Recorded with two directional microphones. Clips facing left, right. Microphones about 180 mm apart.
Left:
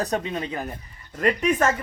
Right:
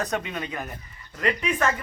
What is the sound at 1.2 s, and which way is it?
Speech, 45° left (ahead or behind).